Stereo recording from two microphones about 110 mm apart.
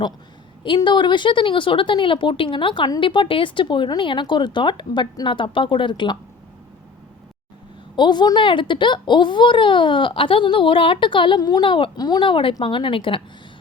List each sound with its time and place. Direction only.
0.9 s a child's voice: 45° left (ahead or behind)
7.9 s a child's voice: 45° left (ahead or behind)
11.3 s a child's voice: 35° left (ahead or behind)